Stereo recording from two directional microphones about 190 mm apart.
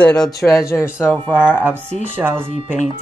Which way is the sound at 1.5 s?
10° right (ahead or behind).